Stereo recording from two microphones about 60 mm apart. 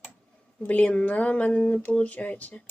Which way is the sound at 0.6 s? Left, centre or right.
Left.